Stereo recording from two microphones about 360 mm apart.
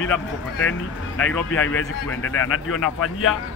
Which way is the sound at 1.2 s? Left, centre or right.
Left.